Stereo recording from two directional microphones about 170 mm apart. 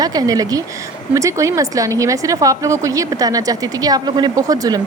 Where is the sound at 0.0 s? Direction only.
20° right (ahead or behind).